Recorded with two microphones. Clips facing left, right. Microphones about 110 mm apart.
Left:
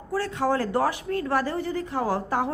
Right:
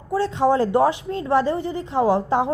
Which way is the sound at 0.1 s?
20° right (ahead or behind).